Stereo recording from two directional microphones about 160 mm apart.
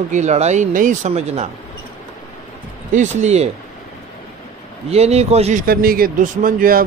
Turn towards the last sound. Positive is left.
turn(degrees=-65)  # may be behind; listen again after turning